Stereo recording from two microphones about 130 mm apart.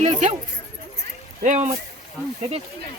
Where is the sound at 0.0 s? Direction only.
60° right (ahead or behind).